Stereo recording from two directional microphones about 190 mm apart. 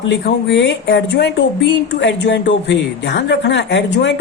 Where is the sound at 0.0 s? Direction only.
70° left (ahead or behind).